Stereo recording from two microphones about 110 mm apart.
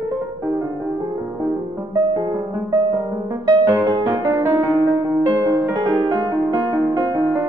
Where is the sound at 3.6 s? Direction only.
25° right (ahead or behind).